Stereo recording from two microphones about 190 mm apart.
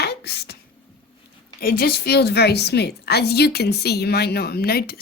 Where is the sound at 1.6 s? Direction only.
50° left (ahead or behind).